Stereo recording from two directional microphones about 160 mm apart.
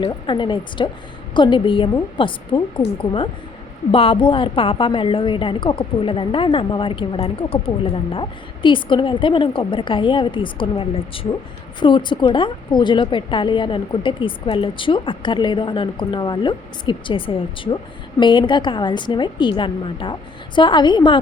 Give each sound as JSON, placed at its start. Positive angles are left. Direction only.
{"t": 0.0, "sound": "a woman's voice", "side_deg": 30}